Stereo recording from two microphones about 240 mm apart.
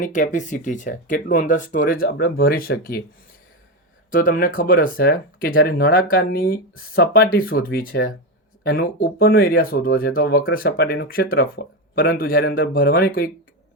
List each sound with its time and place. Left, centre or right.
0.0 s speech: left
4.1 s speech: left